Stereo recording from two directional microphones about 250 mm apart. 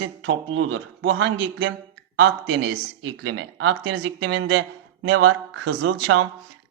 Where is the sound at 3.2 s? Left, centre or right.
Right.